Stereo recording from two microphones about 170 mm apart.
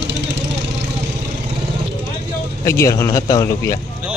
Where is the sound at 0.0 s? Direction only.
90° right.